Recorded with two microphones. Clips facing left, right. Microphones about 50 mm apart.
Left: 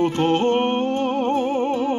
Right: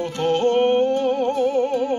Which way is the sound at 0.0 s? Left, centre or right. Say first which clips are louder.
Left 1 dB; left.